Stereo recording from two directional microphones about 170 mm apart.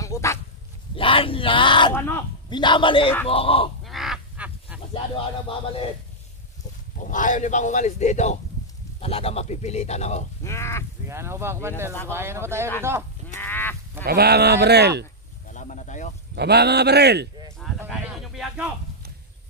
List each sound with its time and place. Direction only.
0.0 s dog: 15° left (ahead or behind)
0.9 s speech: 30° left (ahead or behind)
2.0 s speech: 15° left (ahead or behind)
2.5 s a man's voice: 30° left (ahead or behind)
3.8 s goose: centre (ahead or behind)
4.9 s speech: 30° left (ahead or behind)
7.0 s speech: 50° left (ahead or behind)
10.4 s speech: 15° left (ahead or behind)
11.1 s speech: 15° right (ahead or behind)
13.4 s goose: 10° left (ahead or behind)
14.0 s speech: 70° right (ahead or behind)
15.5 s a sound: 45° left (ahead or behind)
16.3 s speech: 75° right (ahead or behind)
17.7 s a sound: 5° right (ahead or behind)